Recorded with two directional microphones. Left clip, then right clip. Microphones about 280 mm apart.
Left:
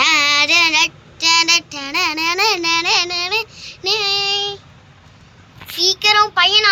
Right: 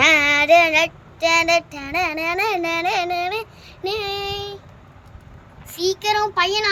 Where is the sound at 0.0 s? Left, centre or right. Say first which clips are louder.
Left 1 dB; centre.